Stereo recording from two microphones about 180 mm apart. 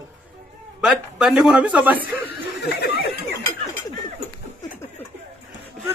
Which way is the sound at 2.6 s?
65° left (ahead or behind).